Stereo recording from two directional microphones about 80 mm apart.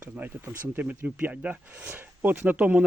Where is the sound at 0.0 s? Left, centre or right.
Right.